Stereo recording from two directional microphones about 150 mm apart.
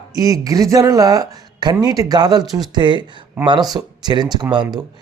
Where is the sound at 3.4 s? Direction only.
15° right (ahead or behind).